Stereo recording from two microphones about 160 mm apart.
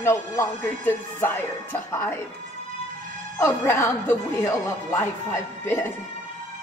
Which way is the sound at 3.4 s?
15° left (ahead or behind).